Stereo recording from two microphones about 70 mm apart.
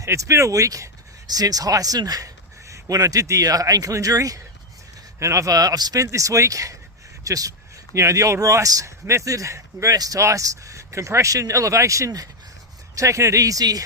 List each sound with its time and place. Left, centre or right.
0.0 s speech: right
1.3 s speech: right
10.2 s speech: right